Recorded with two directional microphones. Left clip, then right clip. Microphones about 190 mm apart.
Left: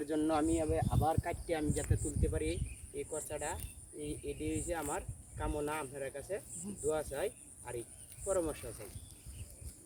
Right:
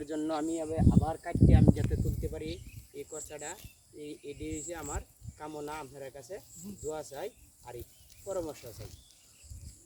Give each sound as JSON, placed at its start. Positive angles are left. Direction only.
{"t": 0.0, "sound": "speech", "side_deg": 15}
{"t": 1.9, "sound": "speech", "side_deg": 45}